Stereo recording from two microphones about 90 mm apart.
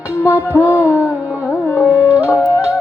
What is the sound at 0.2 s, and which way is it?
Music, 30° left (ahead or behind).